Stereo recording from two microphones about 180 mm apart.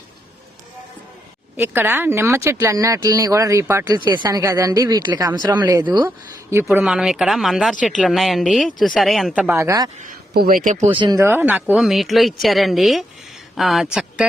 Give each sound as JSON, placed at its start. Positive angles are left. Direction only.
{"t": 1.5, "sound": "speech", "side_deg": -10}
{"t": 6.1, "sound": "speech", "side_deg": -15}
{"t": 10.0, "sound": "speech", "side_deg": -50}
{"t": 10.9, "sound": "speech", "side_deg": -25}
{"t": 11.2, "sound": "speech", "side_deg": -10}